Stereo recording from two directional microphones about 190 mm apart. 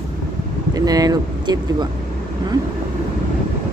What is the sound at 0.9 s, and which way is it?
Speech, 20° right (ahead or behind).